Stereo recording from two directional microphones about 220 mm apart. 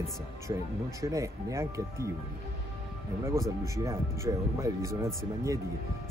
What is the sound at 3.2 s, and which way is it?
Speech, 15° right (ahead or behind).